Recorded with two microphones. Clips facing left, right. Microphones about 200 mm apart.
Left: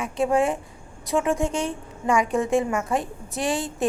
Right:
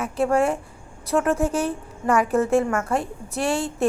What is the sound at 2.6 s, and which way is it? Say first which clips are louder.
Speech: right 2 dB; 15° left (ahead or behind).